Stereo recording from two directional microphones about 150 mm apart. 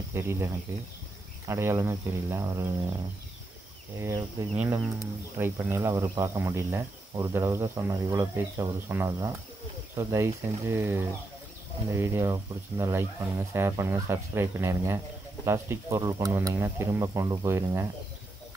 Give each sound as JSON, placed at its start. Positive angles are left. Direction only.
{"t": 0.1, "sound": "speech", "side_deg": -15}
{"t": 4.0, "sound": "speech", "side_deg": -20}